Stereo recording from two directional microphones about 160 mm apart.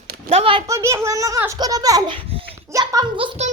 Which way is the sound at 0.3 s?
35° right (ahead or behind).